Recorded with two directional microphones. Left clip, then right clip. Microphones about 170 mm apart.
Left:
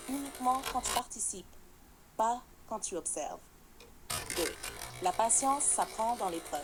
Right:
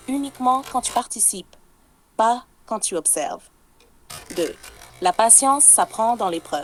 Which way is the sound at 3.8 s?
Centre (ahead or behind).